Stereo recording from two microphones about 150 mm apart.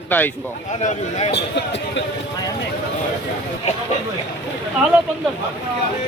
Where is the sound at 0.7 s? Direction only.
50° left (ahead or behind).